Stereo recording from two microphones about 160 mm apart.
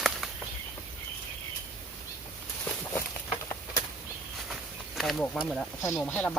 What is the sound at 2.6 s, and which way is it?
Walk, 10° left (ahead or behind).